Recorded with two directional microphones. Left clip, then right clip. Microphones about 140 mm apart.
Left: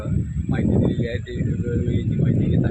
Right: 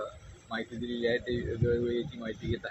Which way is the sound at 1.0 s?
5° right (ahead or behind).